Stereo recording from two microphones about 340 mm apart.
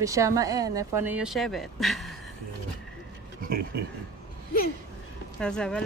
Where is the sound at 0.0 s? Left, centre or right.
Centre.